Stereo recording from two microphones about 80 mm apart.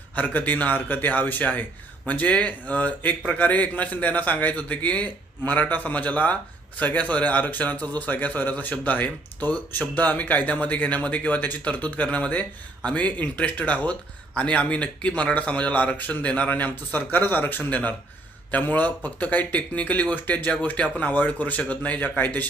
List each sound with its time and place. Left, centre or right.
0.2 s speech: left